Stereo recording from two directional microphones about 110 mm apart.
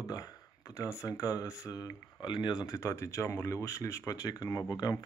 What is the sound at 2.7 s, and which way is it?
Speech, 25° left (ahead or behind).